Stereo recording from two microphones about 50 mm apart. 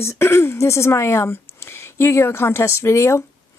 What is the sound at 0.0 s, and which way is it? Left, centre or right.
Speech, left.